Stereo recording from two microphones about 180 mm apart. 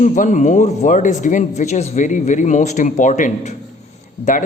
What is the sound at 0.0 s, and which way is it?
Speech, 45° left (ahead or behind).